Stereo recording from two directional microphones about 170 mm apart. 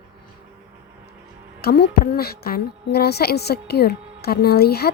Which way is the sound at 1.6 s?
70° left (ahead or behind).